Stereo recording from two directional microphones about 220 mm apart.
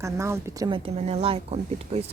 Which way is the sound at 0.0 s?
10° right (ahead or behind).